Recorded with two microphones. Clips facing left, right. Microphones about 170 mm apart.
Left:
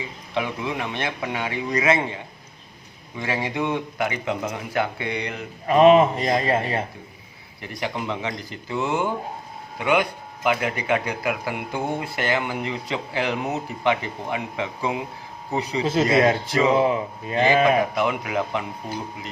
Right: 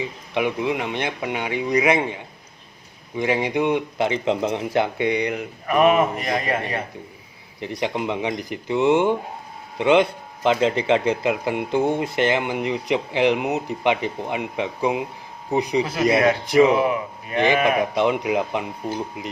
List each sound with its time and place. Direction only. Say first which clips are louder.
0.3 s speech: right 4 dB; 20° right (ahead or behind)
3.2 s speech: right 5 dB; 20° right (ahead or behind)
5.6 s a man's voice: left 3 dB; 25° left (ahead or behind)
7.6 s speech: right 4 dB; 20° right (ahead or behind)
15.8 s a man's voice: left 2 dB; 25° left (ahead or behind)
16.5 s speech: right 5 dB; 20° right (ahead or behind)
16.7 s a man's voice: left 1 dB; 25° left (ahead or behind)
17.9 s speech: right 4 dB; 20° right (ahead or behind)